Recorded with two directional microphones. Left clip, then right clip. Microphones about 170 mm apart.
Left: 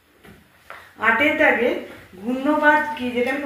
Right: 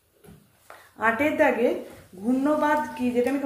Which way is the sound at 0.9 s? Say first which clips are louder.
Left 4 dB; 50° right (ahead or behind).